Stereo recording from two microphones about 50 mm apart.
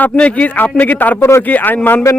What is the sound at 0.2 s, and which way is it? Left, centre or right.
Speech, left.